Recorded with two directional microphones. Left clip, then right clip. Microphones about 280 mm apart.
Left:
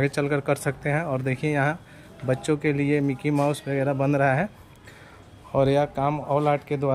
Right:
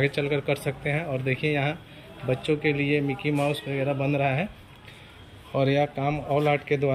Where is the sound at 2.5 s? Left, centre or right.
Left.